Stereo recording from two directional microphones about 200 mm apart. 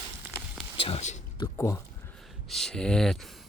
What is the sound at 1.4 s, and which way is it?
Speech, 15° left (ahead or behind).